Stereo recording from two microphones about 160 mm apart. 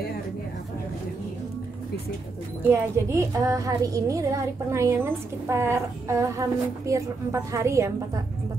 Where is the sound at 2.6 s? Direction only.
15° right (ahead or behind).